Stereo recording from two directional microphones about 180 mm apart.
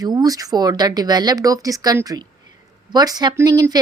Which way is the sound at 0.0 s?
20° right (ahead or behind).